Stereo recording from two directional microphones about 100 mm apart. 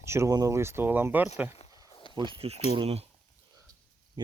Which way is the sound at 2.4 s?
80° right.